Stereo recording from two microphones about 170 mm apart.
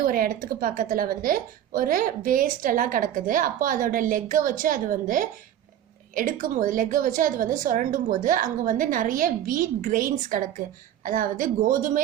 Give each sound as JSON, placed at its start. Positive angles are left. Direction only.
{"t": 0.0, "sound": "a woman's voice", "side_deg": -55}